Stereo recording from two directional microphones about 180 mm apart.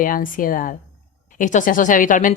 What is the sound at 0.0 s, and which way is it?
A woman's voice, 50° left (ahead or behind).